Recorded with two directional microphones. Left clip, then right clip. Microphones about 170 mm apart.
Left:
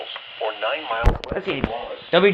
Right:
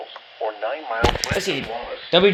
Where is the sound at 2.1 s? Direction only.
20° right (ahead or behind).